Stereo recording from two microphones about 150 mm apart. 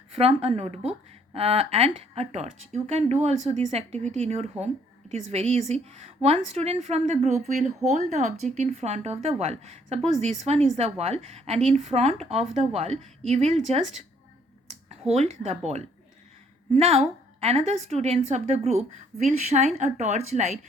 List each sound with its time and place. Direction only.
0.1 s a woman's voice: 40° right (ahead or behind)